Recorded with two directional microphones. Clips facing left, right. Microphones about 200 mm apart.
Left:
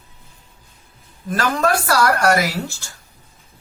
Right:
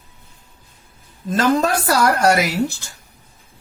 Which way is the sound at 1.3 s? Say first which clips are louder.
Right 2 dB; 20° right (ahead or behind).